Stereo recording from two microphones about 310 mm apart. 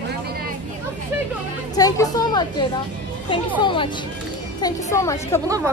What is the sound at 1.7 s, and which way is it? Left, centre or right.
A woman's voice, centre.